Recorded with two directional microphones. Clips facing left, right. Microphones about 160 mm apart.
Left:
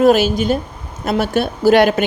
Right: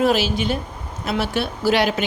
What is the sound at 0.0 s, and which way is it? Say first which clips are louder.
A woman's voice: left 6 dB; 45° left (ahead or behind).